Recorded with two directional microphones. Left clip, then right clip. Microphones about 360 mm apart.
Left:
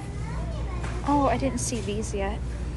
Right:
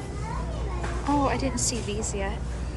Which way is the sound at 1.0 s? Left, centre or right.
Centre.